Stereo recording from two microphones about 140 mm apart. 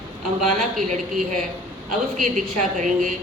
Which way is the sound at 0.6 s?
60° right (ahead or behind).